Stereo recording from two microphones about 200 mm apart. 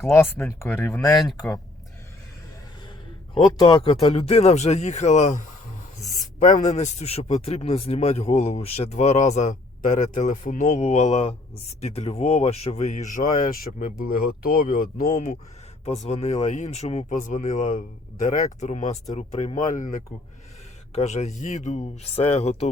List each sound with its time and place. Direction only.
0.1 s speech: 10° left (ahead or behind)
1.1 s speech: centre (ahead or behind)
3.3 s a man's voice: 25° left (ahead or behind)